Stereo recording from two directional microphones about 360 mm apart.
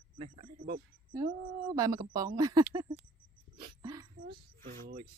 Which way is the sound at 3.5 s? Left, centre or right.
Centre.